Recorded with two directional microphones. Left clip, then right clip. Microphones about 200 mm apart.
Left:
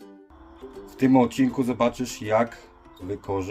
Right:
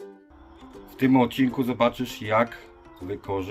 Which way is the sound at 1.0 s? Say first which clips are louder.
Left 1 dB; centre (ahead or behind).